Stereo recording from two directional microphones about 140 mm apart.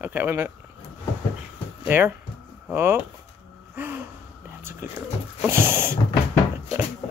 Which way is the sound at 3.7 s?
15° right (ahead or behind).